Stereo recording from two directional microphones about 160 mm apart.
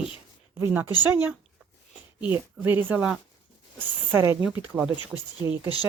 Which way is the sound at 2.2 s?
10° right (ahead or behind).